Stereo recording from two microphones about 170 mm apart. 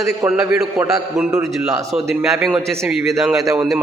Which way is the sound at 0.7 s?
20° right (ahead or behind).